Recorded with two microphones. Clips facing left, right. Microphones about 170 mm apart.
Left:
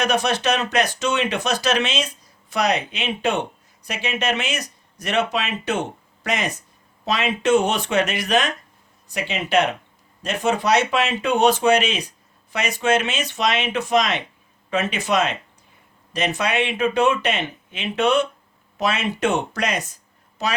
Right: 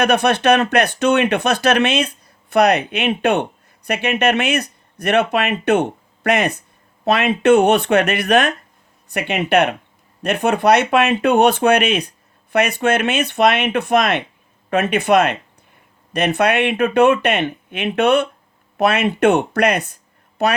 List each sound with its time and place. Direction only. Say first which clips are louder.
0.0 s speech: right 6 dB; 60° right (ahead or behind)